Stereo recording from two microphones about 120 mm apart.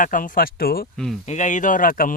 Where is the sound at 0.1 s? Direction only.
90° left.